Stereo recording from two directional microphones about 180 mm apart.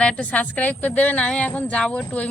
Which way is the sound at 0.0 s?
5° left (ahead or behind).